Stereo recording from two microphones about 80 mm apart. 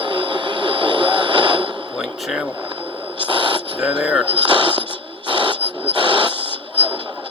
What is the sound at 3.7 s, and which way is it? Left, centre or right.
Radio, centre.